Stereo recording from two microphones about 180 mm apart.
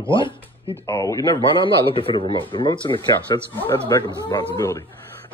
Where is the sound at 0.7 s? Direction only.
15° left (ahead or behind).